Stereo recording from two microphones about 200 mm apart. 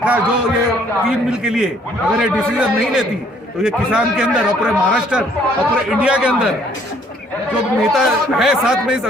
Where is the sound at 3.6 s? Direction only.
5° right (ahead or behind).